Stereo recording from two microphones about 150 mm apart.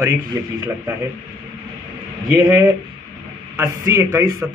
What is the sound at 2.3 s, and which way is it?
A man's voice, 20° right (ahead or behind).